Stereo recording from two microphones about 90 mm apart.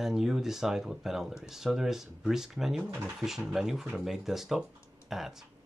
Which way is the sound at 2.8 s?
25° right (ahead or behind).